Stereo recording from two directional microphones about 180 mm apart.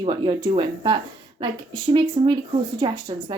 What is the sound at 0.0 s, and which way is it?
Speech, 25° right (ahead or behind).